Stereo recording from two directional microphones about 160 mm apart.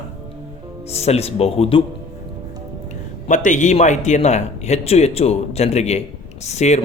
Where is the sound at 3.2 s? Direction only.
50° left (ahead or behind).